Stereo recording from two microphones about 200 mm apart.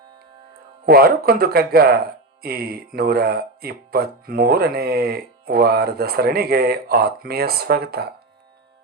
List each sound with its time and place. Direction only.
0.9 s speech: 50° right (ahead or behind)